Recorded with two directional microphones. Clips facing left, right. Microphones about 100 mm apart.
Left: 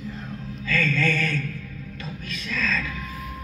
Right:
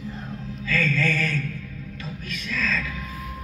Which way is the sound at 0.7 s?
10° right (ahead or behind).